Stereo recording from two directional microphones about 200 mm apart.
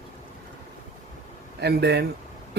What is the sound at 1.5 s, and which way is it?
Speech, 55° right (ahead or behind).